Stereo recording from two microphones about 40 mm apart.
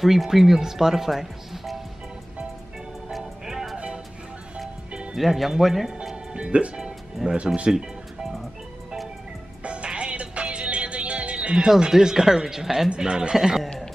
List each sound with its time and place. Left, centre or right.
0.0 s speech: centre
3.1 s music: centre
3.7 s music: right
5.1 s speech: centre
6.3 s speech: right
7.2 s speech: centre
7.7 s music: centre
9.6 s music: right
11.5 s speech: centre
12.9 s speech: right